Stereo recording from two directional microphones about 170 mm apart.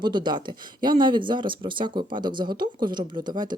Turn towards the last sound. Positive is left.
turn(degrees=-25)  # may be behind; listen again after turning